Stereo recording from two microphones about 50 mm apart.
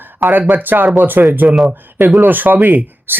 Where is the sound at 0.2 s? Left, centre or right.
Right.